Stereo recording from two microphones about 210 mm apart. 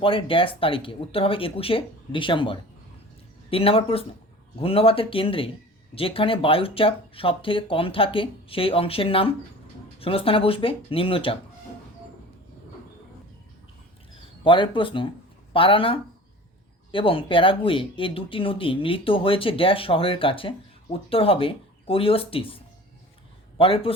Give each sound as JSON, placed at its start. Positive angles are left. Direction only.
{"t": 0.0, "sound": "speech", "side_deg": 25}
{"t": 14.2, "sound": "speech", "side_deg": 25}